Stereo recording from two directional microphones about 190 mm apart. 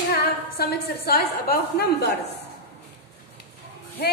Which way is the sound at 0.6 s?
55° left (ahead or behind).